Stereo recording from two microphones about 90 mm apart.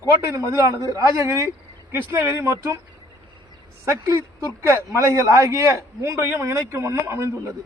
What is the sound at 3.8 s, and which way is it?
A man's voice, 30° right (ahead or behind).